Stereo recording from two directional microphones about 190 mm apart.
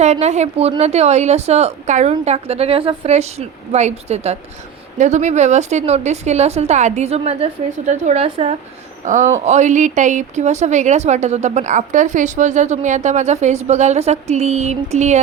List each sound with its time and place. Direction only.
0.0 s a woman's voice: 35° right (ahead or behind)